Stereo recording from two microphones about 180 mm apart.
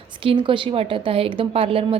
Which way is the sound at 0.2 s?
30° right (ahead or behind).